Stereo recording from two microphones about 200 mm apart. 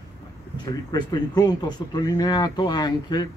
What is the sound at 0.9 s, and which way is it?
Speech, 20° left (ahead or behind).